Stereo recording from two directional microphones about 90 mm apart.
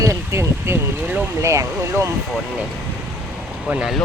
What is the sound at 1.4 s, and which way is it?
Speech, 35° right (ahead or behind).